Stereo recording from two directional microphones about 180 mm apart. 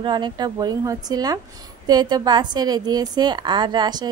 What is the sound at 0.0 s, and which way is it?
A woman's voice, 25° right (ahead or behind).